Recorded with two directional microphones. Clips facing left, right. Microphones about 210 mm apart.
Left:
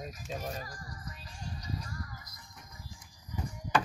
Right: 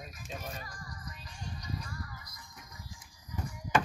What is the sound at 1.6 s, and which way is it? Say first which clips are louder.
Music: left 1 dB; 35° left (ahead or behind).